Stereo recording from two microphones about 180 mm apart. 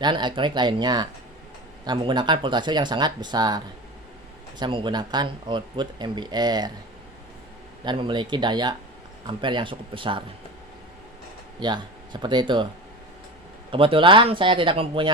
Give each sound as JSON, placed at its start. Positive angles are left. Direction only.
{"t": 0.0, "sound": "speech", "side_deg": -25}
{"t": 4.6, "sound": "speech", "side_deg": -25}
{"t": 7.9, "sound": "speech", "side_deg": -25}
{"t": 11.6, "sound": "speech", "side_deg": -25}
{"t": 13.7, "sound": "speech", "side_deg": -30}